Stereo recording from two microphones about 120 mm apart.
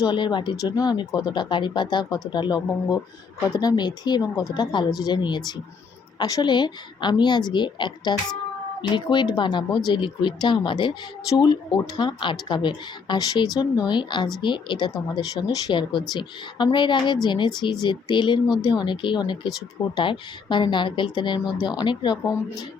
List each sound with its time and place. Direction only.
0.0 s speech: 40° left (ahead or behind)